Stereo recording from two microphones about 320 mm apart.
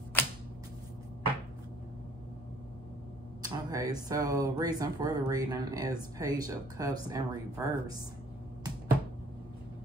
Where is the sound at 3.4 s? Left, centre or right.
Centre.